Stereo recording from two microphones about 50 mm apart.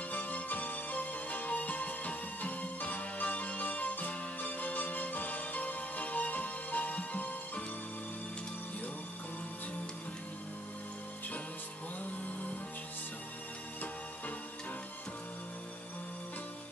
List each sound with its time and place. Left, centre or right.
0.1 s music: left